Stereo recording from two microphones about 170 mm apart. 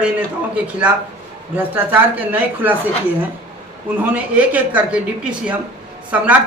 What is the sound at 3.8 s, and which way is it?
Speech, 10° right (ahead or behind).